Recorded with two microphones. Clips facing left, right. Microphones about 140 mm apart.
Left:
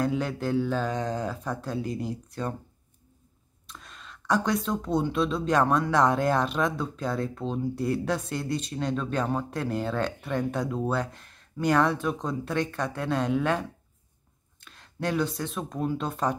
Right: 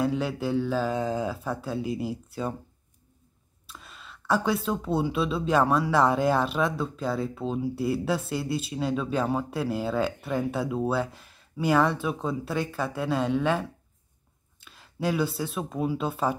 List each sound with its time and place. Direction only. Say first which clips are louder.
0.0 s speech: right 1 dB; 5° right (ahead or behind)
3.6 s speech: even; 5° right (ahead or behind)